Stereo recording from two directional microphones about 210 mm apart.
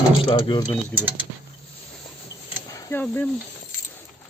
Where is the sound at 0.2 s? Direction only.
25° left (ahead or behind).